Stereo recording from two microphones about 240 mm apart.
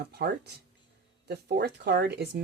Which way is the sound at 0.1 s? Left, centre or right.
Right.